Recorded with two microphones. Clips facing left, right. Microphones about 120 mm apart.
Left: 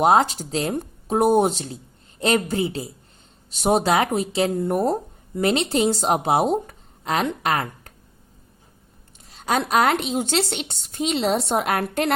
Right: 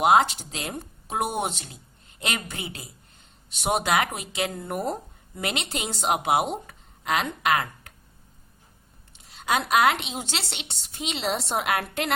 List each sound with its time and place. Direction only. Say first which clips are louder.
0.0 s a woman's voice: left 2 dB; 40° left (ahead or behind)
9.3 s a woman's voice: left 2 dB; 40° left (ahead or behind)